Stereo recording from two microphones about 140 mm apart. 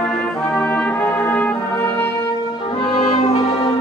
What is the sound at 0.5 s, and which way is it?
Brass instrument, 10° left (ahead or behind).